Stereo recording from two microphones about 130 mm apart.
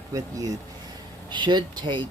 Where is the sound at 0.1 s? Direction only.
25° right (ahead or behind).